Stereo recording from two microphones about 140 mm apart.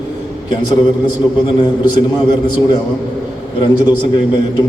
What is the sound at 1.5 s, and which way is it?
A man's voice, 35° left (ahead or behind).